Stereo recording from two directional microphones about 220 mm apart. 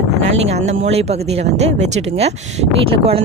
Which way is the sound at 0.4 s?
30° right (ahead or behind).